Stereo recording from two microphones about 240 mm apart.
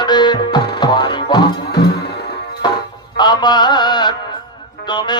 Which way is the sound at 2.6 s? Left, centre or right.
Centre.